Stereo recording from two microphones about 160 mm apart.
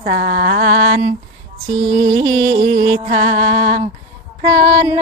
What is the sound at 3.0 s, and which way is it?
Music, 55° right (ahead or behind).